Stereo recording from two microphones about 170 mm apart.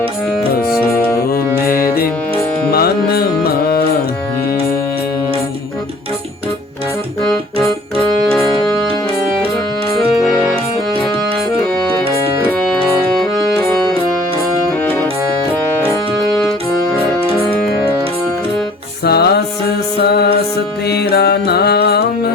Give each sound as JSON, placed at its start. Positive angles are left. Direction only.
{"t": 0.9, "sound": "music", "side_deg": 15}
{"t": 1.3, "sound": "music", "side_deg": 60}
{"t": 7.2, "sound": "music", "side_deg": 0}
{"t": 13.3, "sound": "music", "side_deg": 0}
{"t": 16.3, "sound": "music", "side_deg": 5}
{"t": 19.0, "sound": "music", "side_deg": 70}